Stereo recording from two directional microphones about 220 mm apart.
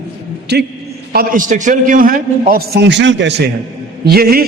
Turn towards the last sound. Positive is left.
turn(degrees=-45)  # may be behind; listen again after turning